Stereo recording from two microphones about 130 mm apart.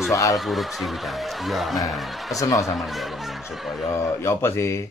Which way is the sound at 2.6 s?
Centre (ahead or behind).